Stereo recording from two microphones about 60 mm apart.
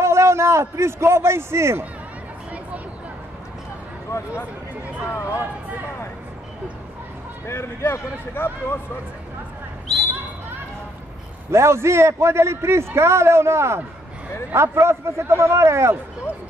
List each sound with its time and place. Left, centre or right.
0.0 s a man's voice: right
4.1 s speech: left
7.4 s speech: left
11.5 s a man's voice: right